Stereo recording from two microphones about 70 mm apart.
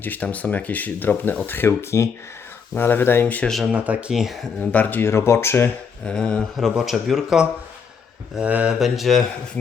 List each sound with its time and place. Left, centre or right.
0.0 s speech: left
3.7 s speech: centre
4.1 s speech: centre
4.6 s speech: left
5.0 s speech: left
6.1 s speech: centre
6.6 s speech: centre
8.4 s speech: centre
8.8 s speech: centre